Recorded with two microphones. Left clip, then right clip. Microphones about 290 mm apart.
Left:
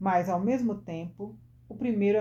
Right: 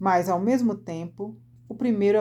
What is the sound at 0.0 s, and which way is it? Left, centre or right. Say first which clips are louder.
Speech: right 4 dB; right.